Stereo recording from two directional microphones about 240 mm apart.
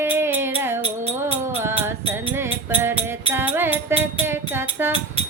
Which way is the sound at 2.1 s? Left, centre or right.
Centre.